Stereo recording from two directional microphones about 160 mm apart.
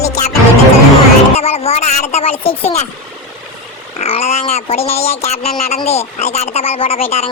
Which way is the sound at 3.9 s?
40° left (ahead or behind).